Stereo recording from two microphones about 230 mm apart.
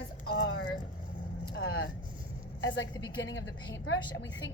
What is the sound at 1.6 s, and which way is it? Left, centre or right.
Vehicle, left.